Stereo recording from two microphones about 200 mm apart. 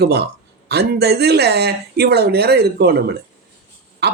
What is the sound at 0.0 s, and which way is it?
Speech, 55° right (ahead or behind).